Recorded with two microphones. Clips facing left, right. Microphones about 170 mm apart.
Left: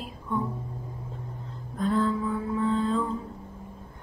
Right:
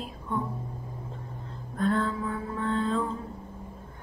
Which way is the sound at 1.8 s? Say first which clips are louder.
Left 2 dB; centre (ahead or behind).